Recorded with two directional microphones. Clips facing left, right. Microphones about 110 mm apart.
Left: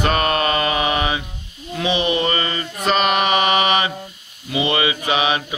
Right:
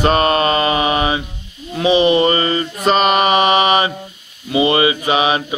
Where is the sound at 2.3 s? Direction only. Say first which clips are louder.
Right 6 dB; 35° right (ahead or behind).